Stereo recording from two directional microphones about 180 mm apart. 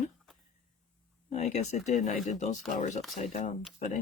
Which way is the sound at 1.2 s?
40° left (ahead or behind).